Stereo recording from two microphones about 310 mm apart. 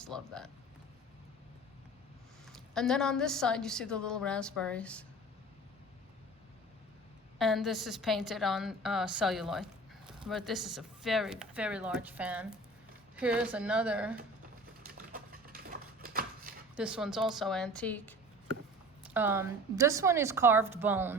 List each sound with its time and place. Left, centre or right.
0.0 s a woman's voice: centre
2.5 s a woman's voice: centre
7.3 s a woman's voice: centre
15.1 s a sound: right
16.7 s a woman's voice: centre
19.1 s a woman's voice: centre